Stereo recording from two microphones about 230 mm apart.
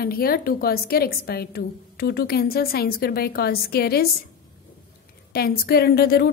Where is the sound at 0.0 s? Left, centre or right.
Left.